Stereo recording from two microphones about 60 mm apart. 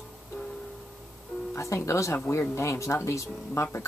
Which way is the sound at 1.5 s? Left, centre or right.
Left.